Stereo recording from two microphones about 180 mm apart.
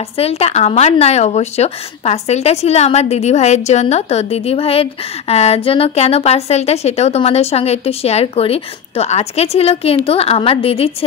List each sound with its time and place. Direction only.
0.2 s a woman's voice: 35° left (ahead or behind)